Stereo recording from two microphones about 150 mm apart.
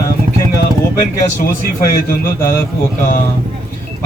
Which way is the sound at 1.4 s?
70° left (ahead or behind).